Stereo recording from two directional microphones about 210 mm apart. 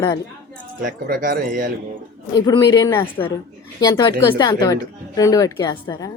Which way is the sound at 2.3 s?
20° left (ahead or behind).